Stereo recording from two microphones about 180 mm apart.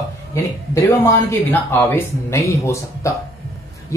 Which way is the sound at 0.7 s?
15° left (ahead or behind).